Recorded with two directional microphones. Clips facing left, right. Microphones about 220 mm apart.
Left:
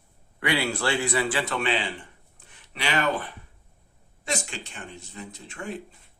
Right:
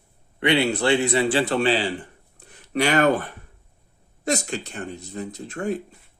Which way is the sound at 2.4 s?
40° right (ahead or behind).